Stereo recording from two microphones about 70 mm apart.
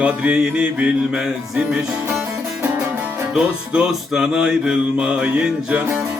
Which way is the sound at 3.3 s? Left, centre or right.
Centre.